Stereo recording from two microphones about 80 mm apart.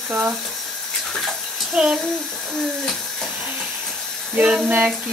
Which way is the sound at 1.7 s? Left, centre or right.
Centre.